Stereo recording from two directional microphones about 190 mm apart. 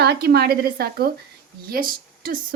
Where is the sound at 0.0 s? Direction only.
55° right (ahead or behind).